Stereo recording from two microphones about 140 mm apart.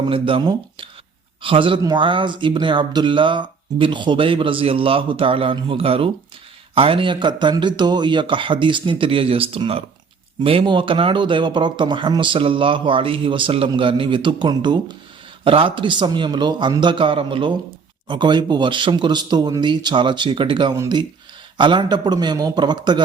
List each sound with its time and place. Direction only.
0.1 s speech: 40° right (ahead or behind)